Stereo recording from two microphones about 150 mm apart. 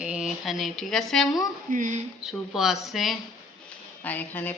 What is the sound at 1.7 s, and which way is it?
Child singing, 60° right (ahead or behind).